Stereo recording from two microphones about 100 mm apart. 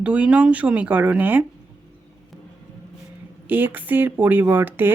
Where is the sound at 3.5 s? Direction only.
20° right (ahead or behind).